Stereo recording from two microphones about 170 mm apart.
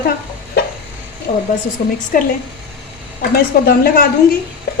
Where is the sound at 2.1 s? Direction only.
55° left (ahead or behind).